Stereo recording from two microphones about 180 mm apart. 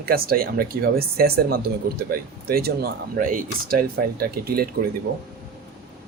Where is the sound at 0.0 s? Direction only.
55° right (ahead or behind).